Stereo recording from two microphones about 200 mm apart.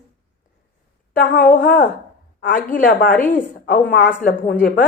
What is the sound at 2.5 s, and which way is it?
A woman's voice, 45° left (ahead or behind).